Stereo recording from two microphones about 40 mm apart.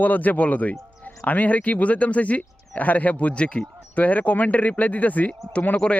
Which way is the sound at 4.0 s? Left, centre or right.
Left.